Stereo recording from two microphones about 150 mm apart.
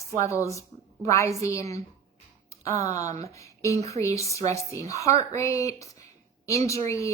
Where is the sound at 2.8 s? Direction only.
20° left (ahead or behind).